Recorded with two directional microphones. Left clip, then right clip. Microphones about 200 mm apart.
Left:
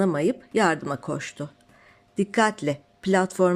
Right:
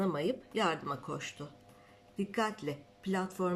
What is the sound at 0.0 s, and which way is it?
Speech, 40° left (ahead or behind).